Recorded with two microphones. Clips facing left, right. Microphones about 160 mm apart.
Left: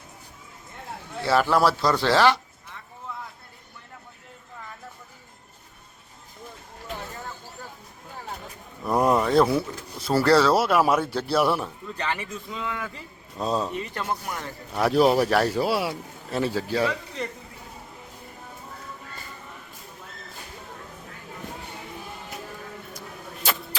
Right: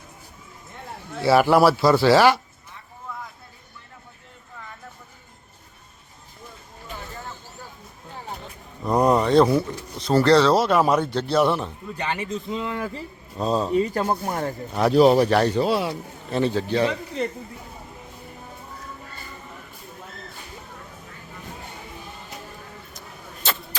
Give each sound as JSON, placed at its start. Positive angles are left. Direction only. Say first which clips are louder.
{"t": 1.2, "sound": "speech", "louder": "right 5 dB", "side_deg": -10}
{"t": 8.9, "sound": "speech", "louder": "right 3 dB", "side_deg": 0}
{"t": 12.2, "sound": "speech", "louder": "right 5 dB", "side_deg": -30}
{"t": 13.4, "sound": "speech", "louder": "right 3 dB", "side_deg": 0}
{"t": 13.7, "sound": "speech", "louder": "right 8 dB", "side_deg": -40}
{"t": 14.7, "sound": "speech", "louder": "right 3 dB", "side_deg": 0}
{"t": 23.0, "sound": "vehicle", "louder": "left 2 dB", "side_deg": 10}